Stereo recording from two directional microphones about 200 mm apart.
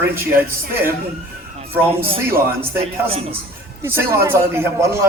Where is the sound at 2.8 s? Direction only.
30° right (ahead or behind).